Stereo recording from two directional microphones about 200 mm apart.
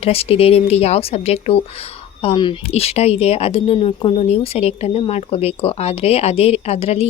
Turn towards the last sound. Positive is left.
turn(degrees=30)  # may be behind; listen again after turning